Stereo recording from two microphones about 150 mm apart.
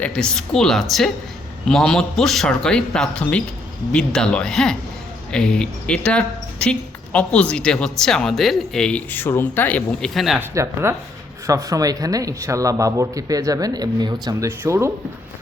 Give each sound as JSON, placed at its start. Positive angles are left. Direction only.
{"t": 0.0, "sound": "a woman's voice", "side_deg": 5}
{"t": 10.5, "sound": "speech", "side_deg": -20}
{"t": 14.4, "sound": "speech", "side_deg": -15}